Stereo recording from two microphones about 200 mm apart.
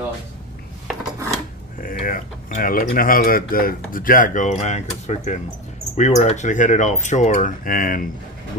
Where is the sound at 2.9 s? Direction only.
45° left (ahead or behind).